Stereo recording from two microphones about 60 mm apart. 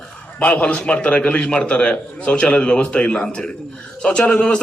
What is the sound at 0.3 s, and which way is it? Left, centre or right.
A man's voice, left.